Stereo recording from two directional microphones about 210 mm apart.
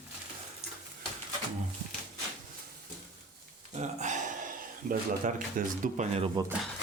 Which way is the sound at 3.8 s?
35° right (ahead or behind).